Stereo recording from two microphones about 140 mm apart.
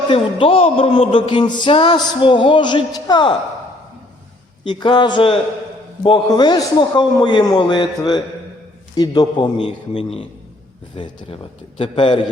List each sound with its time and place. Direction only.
0.1 s speech: 40° left (ahead or behind)
4.6 s speech: 35° left (ahead or behind)